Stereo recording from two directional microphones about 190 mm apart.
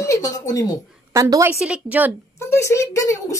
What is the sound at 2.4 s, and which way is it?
Speech, 15° left (ahead or behind).